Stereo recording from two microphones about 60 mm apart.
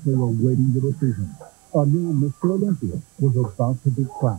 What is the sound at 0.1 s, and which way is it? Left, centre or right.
Speech, centre.